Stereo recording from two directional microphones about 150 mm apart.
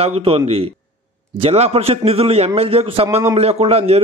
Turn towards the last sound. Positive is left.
turn(degrees=-40)  # may be behind; listen again after turning